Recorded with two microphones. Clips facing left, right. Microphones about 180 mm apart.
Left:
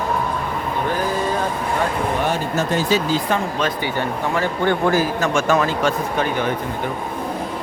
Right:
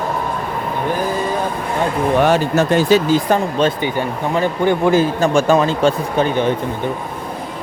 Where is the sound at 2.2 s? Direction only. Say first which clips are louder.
Right 7 dB; 75° right (ahead or behind).